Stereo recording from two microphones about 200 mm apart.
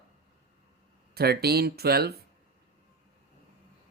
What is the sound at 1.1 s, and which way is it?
Speech, 50° right (ahead or behind).